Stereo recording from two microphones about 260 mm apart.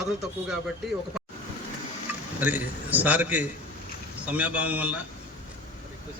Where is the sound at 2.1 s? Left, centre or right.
Centre.